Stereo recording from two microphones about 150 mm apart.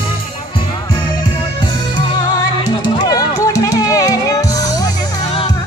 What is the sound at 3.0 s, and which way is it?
Music, 25° left (ahead or behind).